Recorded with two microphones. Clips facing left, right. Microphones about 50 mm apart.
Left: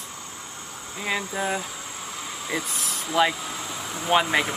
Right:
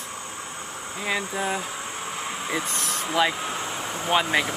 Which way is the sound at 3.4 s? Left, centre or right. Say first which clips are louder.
Right 3 dB; right.